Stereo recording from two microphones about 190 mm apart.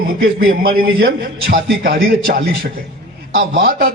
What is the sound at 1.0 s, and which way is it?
A man's voice, 55° right (ahead or behind).